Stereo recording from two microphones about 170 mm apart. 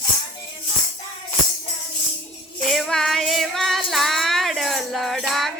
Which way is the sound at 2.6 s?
5° left (ahead or behind).